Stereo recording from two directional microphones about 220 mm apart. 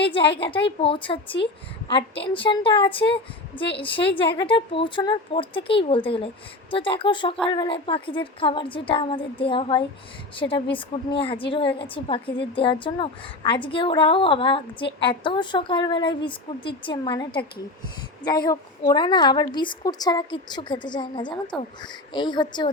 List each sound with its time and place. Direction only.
0.0 s a woman's voice: 25° left (ahead or behind)